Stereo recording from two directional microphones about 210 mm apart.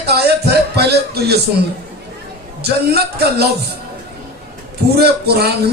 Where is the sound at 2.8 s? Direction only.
50° right (ahead or behind).